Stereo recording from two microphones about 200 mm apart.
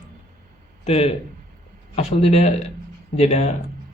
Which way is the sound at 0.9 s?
30° left (ahead or behind).